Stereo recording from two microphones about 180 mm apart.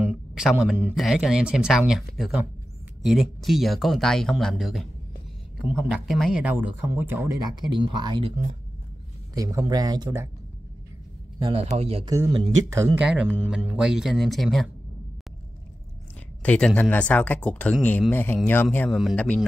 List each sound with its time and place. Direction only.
0.0 s speech: 5° right (ahead or behind)
7.6 s speech: 25° right (ahead or behind)
9.3 s speech: 20° right (ahead or behind)
11.3 s a man's voice: 25° right (ahead or behind)
12.7 s speech: 10° right (ahead or behind)
16.4 s speech: 5° left (ahead or behind)